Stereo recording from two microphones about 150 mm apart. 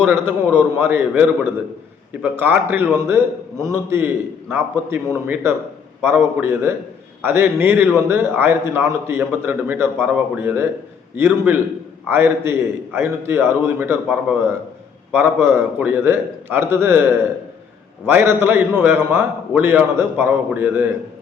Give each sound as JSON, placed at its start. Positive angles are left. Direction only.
{"t": 0.0, "sound": "a man's voice", "side_deg": -15}
{"t": 15.1, "sound": "a man's voice", "side_deg": -15}